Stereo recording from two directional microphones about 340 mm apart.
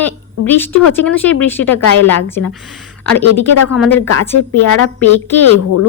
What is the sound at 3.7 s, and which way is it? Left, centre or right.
Speech, centre.